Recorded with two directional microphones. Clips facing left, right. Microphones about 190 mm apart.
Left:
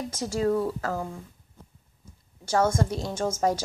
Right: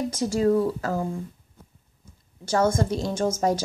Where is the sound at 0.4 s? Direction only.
30° right (ahead or behind).